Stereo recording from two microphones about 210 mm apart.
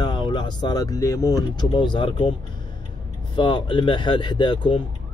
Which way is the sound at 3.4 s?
25° left (ahead or behind).